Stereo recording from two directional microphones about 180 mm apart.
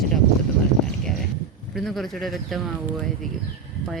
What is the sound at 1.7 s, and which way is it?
Speech, centre (ahead or behind).